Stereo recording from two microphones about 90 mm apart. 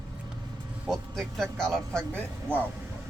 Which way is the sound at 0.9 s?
5° left (ahead or behind).